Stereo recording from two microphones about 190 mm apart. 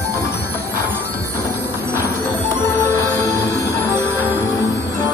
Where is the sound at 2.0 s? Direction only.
15° left (ahead or behind).